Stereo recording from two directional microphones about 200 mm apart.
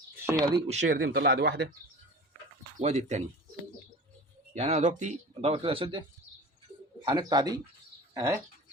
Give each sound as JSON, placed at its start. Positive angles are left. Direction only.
{"t": 0.2, "sound": "a sound", "side_deg": -10}
{"t": 0.9, "sound": "speech", "side_deg": -50}
{"t": 2.7, "sound": "speech", "side_deg": -35}
{"t": 4.5, "sound": "speech", "side_deg": -35}